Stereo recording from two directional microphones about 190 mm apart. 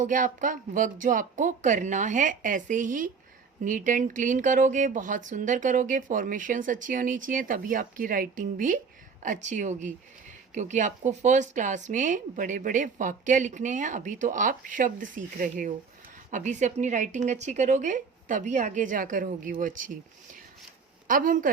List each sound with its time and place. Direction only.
0.0 s speech: 45° right (ahead or behind)
21.1 s speech: 45° right (ahead or behind)